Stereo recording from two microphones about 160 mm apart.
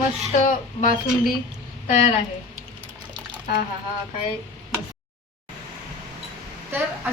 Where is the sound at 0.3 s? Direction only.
50° left (ahead or behind).